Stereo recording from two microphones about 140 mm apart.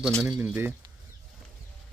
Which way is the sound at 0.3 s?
10° right (ahead or behind).